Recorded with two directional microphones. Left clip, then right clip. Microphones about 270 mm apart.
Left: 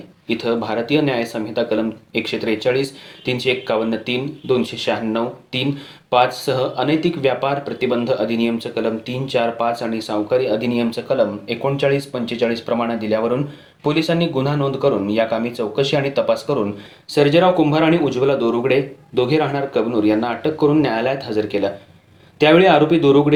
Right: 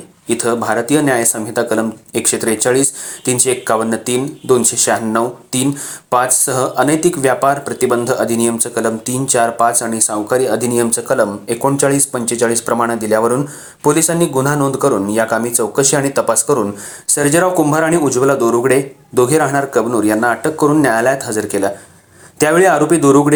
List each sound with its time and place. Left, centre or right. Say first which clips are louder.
0.3 s speech: right 5 dB; right